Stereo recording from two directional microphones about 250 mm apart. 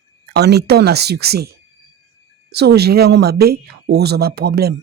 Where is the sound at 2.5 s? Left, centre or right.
Right.